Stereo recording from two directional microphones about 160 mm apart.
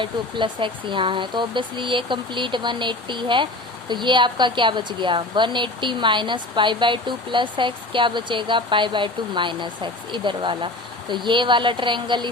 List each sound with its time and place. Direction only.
0.0 s speech: 30° right (ahead or behind)